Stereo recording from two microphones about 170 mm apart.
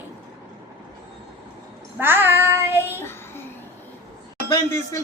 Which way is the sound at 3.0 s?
15° left (ahead or behind).